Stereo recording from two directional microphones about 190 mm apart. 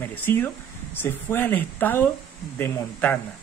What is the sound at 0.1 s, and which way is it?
Speech, 10° left (ahead or behind).